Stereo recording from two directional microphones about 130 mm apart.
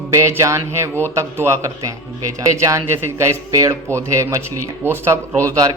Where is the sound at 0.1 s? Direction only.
20° right (ahead or behind).